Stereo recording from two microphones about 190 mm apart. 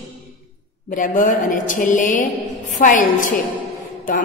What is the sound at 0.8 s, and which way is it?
A woman's voice, 45° left (ahead or behind).